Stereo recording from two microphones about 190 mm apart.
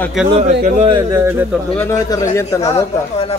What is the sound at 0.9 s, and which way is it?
Speech, 15° right (ahead or behind).